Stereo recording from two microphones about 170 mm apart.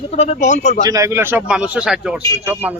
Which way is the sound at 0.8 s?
20° right (ahead or behind).